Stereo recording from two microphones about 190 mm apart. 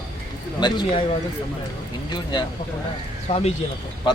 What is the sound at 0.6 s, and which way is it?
Speech, 25° left (ahead or behind).